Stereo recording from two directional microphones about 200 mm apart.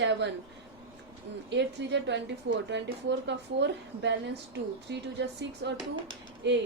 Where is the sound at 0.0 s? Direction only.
60° right (ahead or behind).